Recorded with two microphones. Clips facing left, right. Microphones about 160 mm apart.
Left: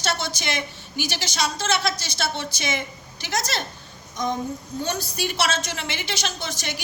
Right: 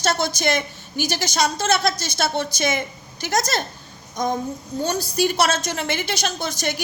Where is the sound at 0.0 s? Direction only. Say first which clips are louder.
Right 6 dB; 45° right (ahead or behind).